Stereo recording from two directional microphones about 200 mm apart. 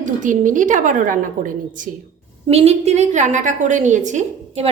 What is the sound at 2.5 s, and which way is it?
A woman's voice, 30° right (ahead or behind).